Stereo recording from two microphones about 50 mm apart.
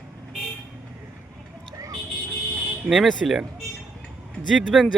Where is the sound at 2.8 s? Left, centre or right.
Centre.